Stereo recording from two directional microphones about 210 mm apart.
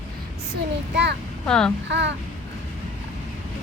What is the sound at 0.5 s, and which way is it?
Speech, 55° right (ahead or behind).